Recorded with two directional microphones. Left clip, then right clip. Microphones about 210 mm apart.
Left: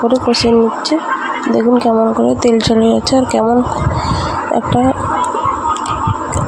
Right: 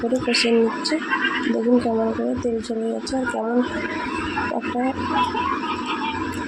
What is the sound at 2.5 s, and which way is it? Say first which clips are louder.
Speech: left 13 dB; 40° left (ahead or behind).